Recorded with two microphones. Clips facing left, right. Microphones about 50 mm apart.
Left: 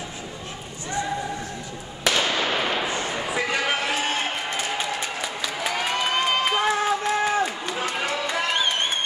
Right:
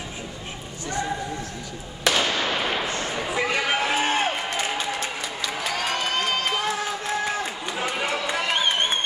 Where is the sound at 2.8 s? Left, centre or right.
Centre.